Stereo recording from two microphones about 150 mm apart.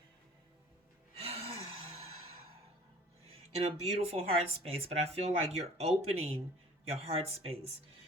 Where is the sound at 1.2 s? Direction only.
40° right (ahead or behind).